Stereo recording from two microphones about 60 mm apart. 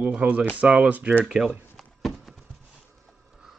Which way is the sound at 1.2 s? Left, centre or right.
Centre.